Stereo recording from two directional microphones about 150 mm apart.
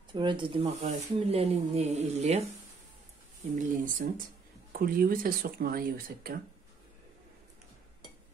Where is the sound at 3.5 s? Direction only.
65° right (ahead or behind).